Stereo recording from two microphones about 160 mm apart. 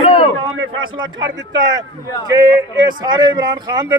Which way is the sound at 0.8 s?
25° right (ahead or behind).